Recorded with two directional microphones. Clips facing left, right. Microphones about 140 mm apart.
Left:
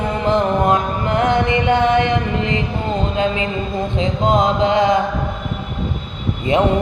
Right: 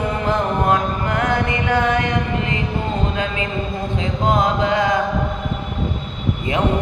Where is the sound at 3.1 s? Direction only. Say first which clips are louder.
Left 5 dB; 25° left (ahead or behind).